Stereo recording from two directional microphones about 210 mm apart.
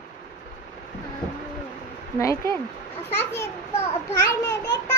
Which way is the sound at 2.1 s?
15° left (ahead or behind).